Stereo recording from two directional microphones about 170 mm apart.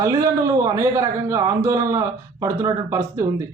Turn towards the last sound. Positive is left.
turn(degrees=-20)  # may be behind; listen again after turning